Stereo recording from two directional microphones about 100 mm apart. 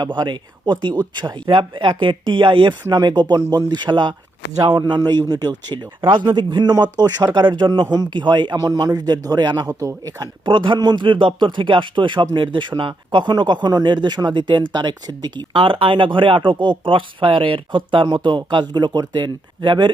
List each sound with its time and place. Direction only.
0.0 s speech: 50° right (ahead or behind)
4.5 s speech: 35° right (ahead or behind)
7.3 s speech: 50° right (ahead or behind)
8.5 s a man's voice: 35° right (ahead or behind)